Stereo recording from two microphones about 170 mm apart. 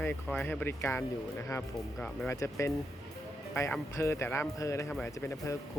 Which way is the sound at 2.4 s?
15° left (ahead or behind).